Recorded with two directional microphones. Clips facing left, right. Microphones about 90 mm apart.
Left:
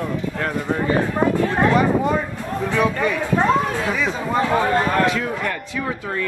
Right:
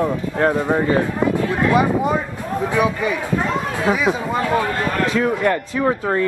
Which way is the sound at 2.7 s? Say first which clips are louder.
Even; 10° right (ahead or behind).